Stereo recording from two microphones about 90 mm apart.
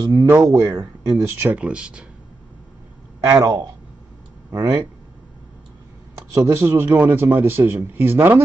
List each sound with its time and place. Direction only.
0.0 s speech: 30° right (ahead or behind)
1.5 s speech: 10° right (ahead or behind)
3.3 s speech: 40° right (ahead or behind)
6.3 s speech: 30° right (ahead or behind)